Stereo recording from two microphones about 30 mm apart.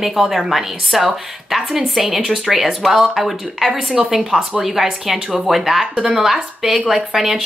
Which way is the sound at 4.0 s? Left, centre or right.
Right.